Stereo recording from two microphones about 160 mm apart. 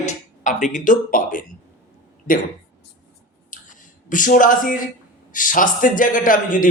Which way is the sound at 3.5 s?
55° left (ahead or behind).